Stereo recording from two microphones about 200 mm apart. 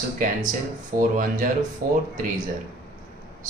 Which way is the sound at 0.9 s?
45° right (ahead or behind).